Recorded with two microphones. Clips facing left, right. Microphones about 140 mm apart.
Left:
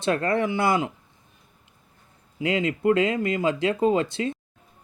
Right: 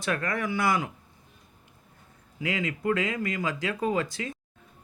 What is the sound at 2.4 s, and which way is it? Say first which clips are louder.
Speech: left 6 dB; 25° left (ahead or behind).